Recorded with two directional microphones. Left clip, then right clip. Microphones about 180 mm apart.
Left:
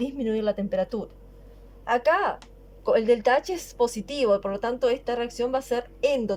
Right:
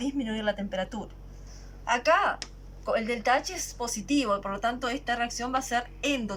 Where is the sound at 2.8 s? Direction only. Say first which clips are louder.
Left 6 dB; 65° left (ahead or behind).